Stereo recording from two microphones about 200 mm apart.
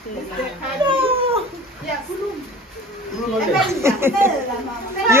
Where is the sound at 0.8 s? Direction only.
25° right (ahead or behind).